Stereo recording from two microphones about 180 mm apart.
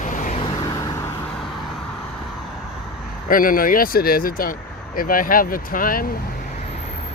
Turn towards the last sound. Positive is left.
turn(degrees=50)  # may be behind; listen again after turning